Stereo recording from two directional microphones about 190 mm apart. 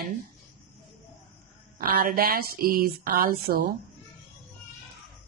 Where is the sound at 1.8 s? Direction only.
50° right (ahead or behind).